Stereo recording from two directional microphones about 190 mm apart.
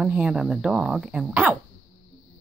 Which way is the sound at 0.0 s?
5° right (ahead or behind).